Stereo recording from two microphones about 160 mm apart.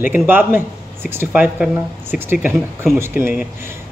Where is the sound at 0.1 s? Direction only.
10° right (ahead or behind).